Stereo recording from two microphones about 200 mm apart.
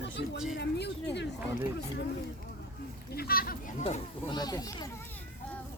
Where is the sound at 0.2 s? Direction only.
55° left (ahead or behind).